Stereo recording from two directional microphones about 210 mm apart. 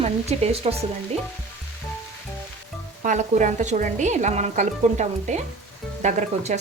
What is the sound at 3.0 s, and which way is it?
Speech, 35° right (ahead or behind).